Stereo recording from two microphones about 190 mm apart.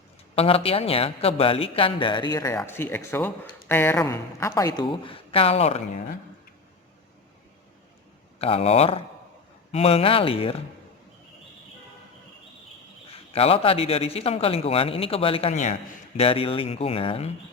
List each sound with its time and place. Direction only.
0.3 s a woman's voice: 30° left (ahead or behind)
8.4 s speech: 30° left (ahead or behind)
13.3 s speech: 30° left (ahead or behind)